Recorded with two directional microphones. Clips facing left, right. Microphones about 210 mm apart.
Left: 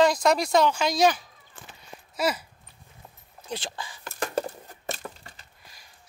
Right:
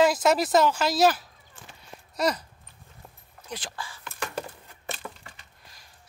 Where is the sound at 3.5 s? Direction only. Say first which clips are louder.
Left 3 dB; 25° left (ahead or behind).